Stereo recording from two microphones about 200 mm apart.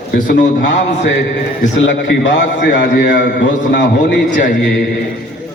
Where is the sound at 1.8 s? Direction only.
65° left (ahead or behind).